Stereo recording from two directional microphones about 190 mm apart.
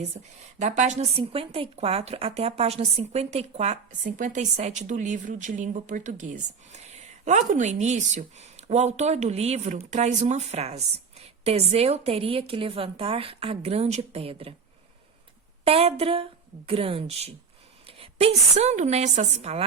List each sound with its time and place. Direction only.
0.6 s a woman's voice: 40° right (ahead or behind)
15.6 s a woman's voice: 30° right (ahead or behind)